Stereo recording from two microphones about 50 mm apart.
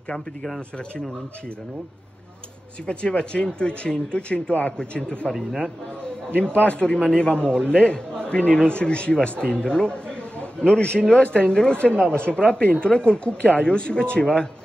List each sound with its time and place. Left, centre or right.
0.1 s speech: centre
2.9 s a man's voice: left
6.3 s a man's voice: left